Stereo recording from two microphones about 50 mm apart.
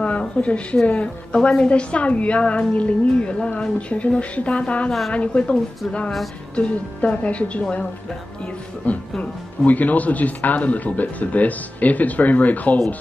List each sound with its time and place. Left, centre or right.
0.0 s a woman's voice: left
8.8 s a woman's voice: left